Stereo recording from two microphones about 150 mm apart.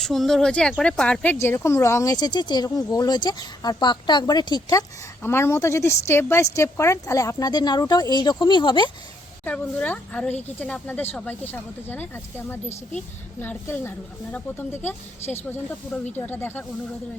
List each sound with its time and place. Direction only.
0.0 s speech: centre (ahead or behind); by 8.9 s 30° left (ahead or behind)
9.4 s a woman's voice: 10° left (ahead or behind)